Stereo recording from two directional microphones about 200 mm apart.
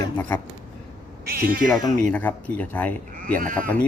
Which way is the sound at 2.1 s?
5° left (ahead or behind).